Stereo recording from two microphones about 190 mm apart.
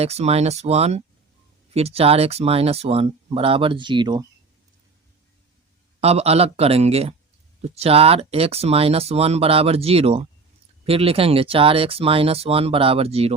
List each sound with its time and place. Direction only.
0.0 s speech: 35° right (ahead or behind)
6.0 s speech: 35° right (ahead or behind)